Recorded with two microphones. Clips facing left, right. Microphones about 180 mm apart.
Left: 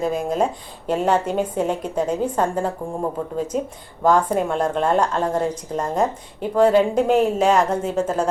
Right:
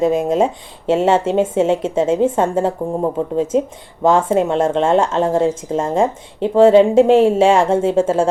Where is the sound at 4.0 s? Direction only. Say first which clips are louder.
Right 4 dB; 25° right (ahead or behind).